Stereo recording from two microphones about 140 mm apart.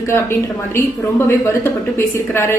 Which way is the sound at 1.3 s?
15° left (ahead or behind).